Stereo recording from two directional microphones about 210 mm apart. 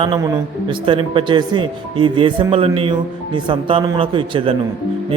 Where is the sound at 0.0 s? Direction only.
20° right (ahead or behind).